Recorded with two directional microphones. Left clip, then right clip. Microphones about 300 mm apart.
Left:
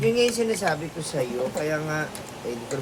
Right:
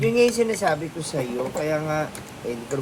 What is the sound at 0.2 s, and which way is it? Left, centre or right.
Speech, right.